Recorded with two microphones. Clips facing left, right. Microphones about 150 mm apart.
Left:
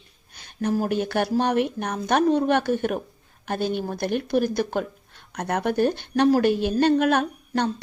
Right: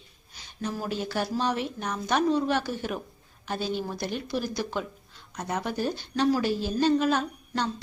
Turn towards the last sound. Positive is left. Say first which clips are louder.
# left 5 dB
turn(degrees=60)  # may be behind; listen again after turning